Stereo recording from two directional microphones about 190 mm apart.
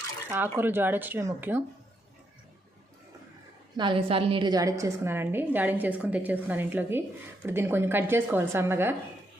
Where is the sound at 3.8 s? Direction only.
25° right (ahead or behind).